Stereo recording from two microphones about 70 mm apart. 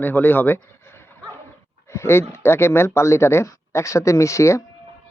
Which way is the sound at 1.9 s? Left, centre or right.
Left.